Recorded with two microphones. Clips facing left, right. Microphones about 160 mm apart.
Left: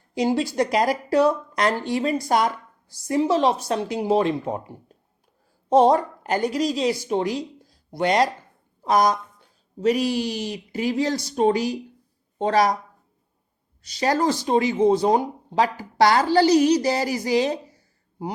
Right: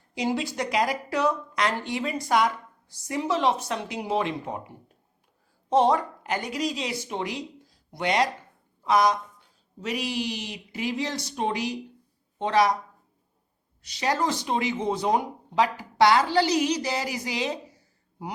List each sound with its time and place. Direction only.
0.1 s speech: 40° left (ahead or behind)
13.8 s speech: 40° left (ahead or behind)